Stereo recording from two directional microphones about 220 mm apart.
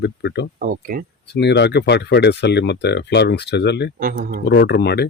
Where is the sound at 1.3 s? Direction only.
50° left (ahead or behind).